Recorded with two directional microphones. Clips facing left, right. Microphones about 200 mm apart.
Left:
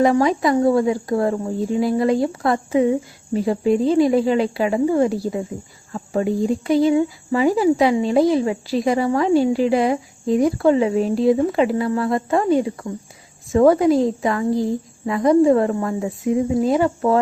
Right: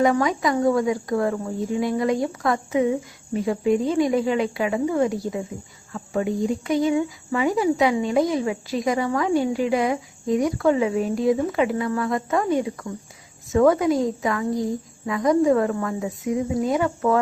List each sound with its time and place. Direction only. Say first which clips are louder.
0.0 s speech: left 4 dB; 30° left (ahead or behind)